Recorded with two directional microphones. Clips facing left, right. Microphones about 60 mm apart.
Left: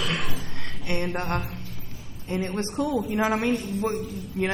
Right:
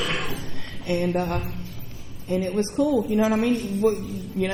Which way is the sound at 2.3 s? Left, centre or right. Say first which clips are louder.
Right 4 dB; left.